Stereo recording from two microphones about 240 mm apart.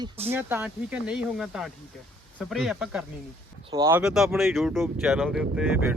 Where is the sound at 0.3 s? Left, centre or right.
Centre.